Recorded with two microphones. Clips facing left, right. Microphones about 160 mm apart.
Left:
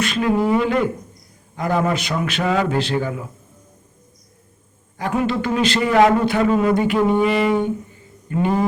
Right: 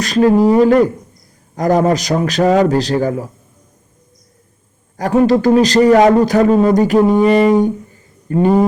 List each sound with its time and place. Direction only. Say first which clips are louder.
0.0 s a man's voice: right 8 dB; 40° right (ahead or behind)
4.9 s a man's voice: right 9 dB; 40° right (ahead or behind)